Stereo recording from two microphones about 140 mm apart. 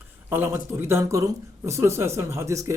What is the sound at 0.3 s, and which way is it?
A man's voice, 15° right (ahead or behind).